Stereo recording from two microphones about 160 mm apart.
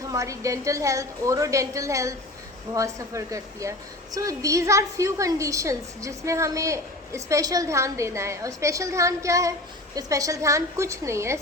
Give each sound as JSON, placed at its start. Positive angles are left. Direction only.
{"t": 0.1, "sound": "a woman's voice", "side_deg": -20}